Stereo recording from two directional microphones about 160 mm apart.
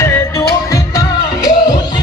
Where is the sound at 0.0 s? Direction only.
20° left (ahead or behind).